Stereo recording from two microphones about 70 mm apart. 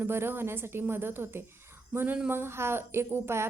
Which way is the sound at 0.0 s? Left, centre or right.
Right.